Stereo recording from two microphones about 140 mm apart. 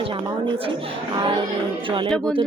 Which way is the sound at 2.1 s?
5° left (ahead or behind).